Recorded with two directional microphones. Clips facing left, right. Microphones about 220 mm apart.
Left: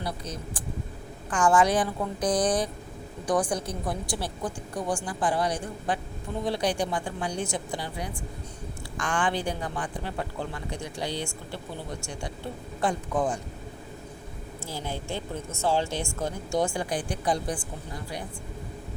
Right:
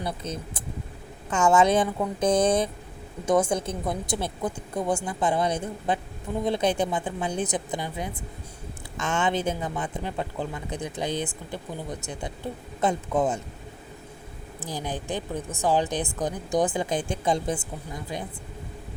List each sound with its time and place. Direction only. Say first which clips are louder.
0.0 s speech: right 2 dB; 25° right (ahead or behind)
14.6 s a woman's voice: right 3 dB; 15° right (ahead or behind)